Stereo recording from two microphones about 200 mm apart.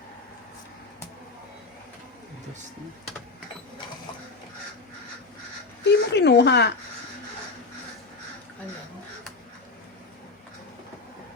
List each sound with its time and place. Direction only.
5.8 s speech: 60° left (ahead or behind)